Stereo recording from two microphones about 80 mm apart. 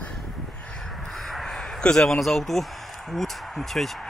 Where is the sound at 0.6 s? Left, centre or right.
Centre.